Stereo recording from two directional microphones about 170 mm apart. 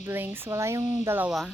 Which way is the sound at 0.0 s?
10° right (ahead or behind).